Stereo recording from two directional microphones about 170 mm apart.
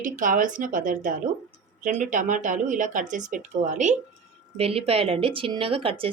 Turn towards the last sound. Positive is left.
turn(degrees=-30)  # may be behind; listen again after turning